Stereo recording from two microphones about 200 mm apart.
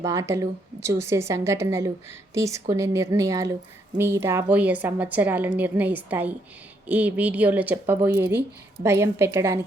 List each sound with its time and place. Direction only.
0.0 s a woman's voice: 15° right (ahead or behind)